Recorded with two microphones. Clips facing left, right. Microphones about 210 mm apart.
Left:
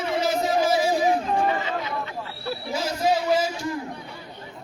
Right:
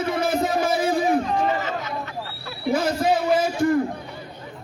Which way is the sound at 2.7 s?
55° right (ahead or behind).